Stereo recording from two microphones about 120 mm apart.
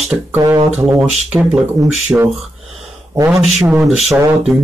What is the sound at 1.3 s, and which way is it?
Speech, 10° right (ahead or behind).